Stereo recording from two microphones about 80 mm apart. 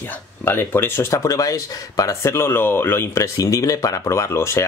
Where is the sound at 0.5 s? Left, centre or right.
Left.